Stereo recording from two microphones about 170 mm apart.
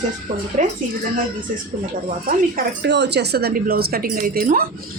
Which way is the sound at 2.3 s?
70° right (ahead or behind).